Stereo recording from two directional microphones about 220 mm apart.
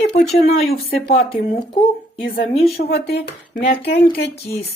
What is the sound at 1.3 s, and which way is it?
Speech, 25° left (ahead or behind).